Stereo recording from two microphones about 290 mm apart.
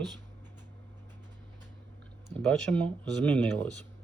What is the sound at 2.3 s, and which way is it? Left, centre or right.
Speech, centre.